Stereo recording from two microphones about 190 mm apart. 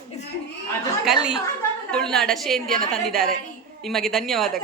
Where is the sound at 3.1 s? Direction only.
50° right (ahead or behind).